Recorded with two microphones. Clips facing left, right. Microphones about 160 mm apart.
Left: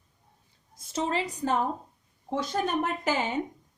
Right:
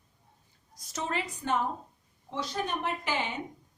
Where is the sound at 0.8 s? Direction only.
30° left (ahead or behind).